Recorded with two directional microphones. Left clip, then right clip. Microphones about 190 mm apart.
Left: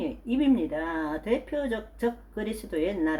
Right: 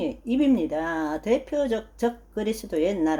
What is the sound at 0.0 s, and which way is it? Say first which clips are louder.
Speech: right 3 dB; 40° right (ahead or behind).